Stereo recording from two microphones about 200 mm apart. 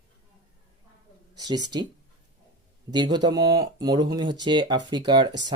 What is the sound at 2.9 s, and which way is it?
Speech, 20° right (ahead or behind).